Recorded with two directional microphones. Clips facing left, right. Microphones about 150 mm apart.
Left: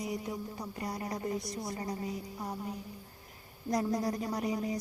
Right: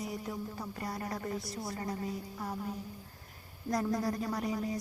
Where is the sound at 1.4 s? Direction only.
5° right (ahead or behind).